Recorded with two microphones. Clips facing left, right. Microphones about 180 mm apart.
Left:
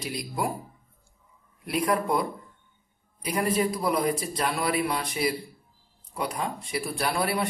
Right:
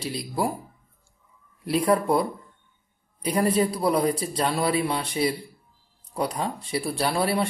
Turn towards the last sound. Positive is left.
turn(degrees=-30)  # may be behind; listen again after turning